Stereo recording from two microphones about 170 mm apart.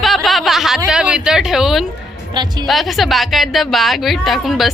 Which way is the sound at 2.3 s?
25° right (ahead or behind).